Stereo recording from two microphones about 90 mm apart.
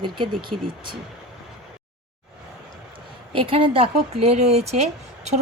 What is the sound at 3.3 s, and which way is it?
Speech, 90° right.